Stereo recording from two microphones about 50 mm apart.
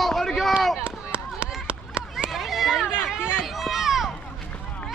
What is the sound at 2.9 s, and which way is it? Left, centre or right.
Chatter, right.